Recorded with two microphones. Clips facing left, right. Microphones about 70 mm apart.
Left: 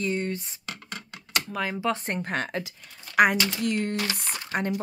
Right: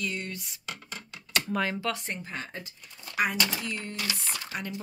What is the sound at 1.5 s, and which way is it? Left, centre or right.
Speech, centre.